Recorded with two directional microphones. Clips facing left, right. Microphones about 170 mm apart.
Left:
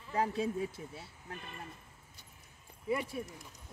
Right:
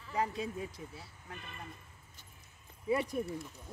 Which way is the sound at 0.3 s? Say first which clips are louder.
Left 5 dB; 25° left (ahead or behind).